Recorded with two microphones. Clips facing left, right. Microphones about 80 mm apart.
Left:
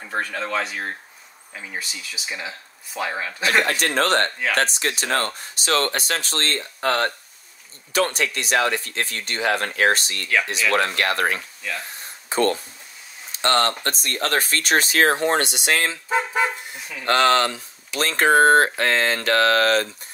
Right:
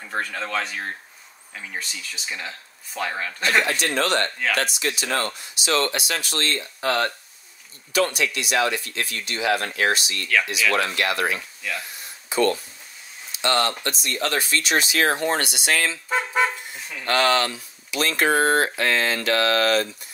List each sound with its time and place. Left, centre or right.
0.1 s speech: centre
3.8 s speech: left
17.0 s speech: left